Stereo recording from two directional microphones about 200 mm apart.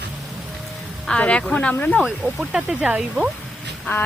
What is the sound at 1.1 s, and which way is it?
Speech, 5° left (ahead or behind).